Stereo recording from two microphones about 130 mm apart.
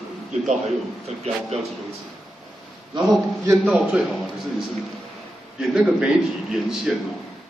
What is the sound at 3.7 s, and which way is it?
Speech, 5° right (ahead or behind).